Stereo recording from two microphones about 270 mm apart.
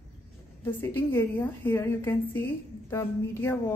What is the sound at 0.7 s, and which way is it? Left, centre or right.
A woman's voice, centre.